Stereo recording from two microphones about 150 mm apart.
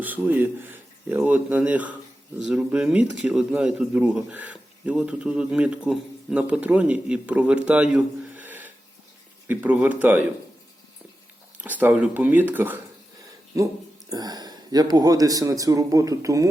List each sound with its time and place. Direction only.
0.0 s speech: 10° right (ahead or behind)
11.6 s speech: 10° right (ahead or behind)